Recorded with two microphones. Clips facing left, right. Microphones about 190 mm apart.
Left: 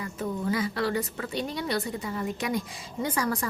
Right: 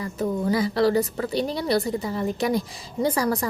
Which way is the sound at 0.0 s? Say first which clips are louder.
Right 5 dB; 35° right (ahead or behind).